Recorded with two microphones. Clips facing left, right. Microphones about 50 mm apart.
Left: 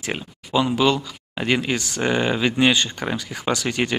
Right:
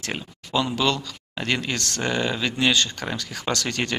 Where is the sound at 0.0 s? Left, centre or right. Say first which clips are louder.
Left 3 dB; centre.